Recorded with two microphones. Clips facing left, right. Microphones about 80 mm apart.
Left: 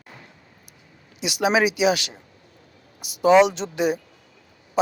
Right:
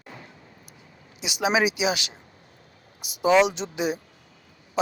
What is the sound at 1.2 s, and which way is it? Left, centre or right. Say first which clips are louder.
Speech: left 3 dB; centre.